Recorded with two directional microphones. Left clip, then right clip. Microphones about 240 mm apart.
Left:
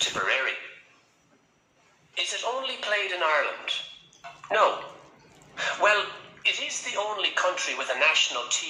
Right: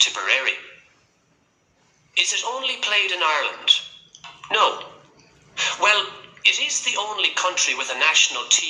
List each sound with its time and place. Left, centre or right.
0.3 s a sound: right
2.1 s a man's voice: right
4.4 s tick-tock: right
5.5 s a man's voice: right
7.9 s a man's voice: right